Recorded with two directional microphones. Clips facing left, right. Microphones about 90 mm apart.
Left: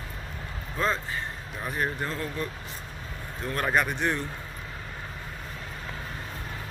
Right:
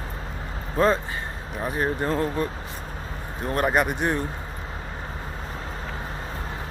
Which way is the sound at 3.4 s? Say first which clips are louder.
Right 4 dB; 20° right (ahead or behind).